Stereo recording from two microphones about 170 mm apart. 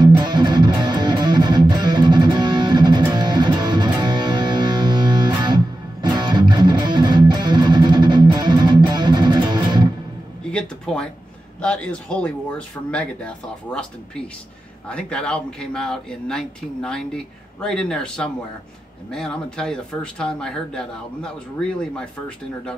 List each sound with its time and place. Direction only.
0.0 s music: 25° right (ahead or behind)
10.4 s a sound: 5° left (ahead or behind)
11.6 s speech: 5° left (ahead or behind)